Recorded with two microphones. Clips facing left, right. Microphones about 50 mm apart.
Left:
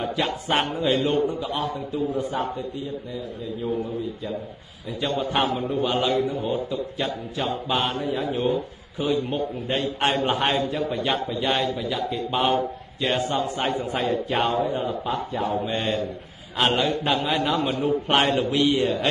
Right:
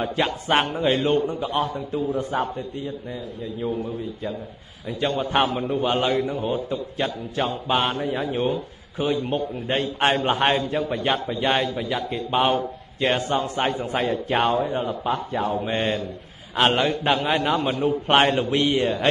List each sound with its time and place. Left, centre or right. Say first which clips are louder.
0.0 s a man's voice: right 2 dB; right
5.0 s a man's voice: right 2 dB; right